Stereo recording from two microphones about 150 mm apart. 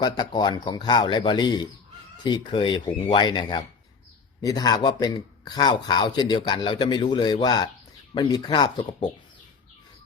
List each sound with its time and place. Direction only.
0.0 s speech: 30° left (ahead or behind)